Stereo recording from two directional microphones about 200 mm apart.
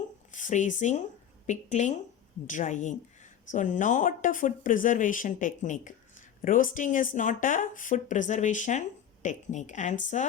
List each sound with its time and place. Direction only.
0.3 s speech: 40° left (ahead or behind)